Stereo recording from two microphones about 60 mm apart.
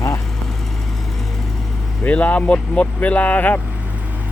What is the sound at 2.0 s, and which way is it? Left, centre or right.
Speech, left.